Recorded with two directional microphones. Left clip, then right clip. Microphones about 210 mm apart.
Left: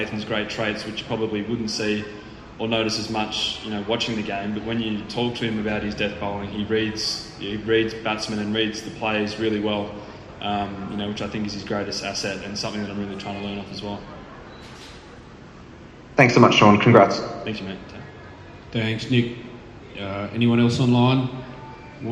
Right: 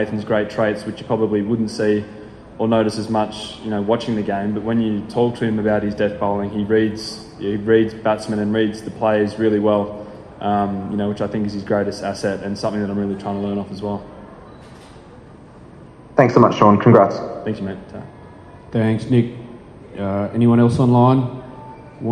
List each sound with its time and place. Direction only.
0.0 s a man's voice: 50° right (ahead or behind)
16.1 s a man's voice: 50° right (ahead or behind)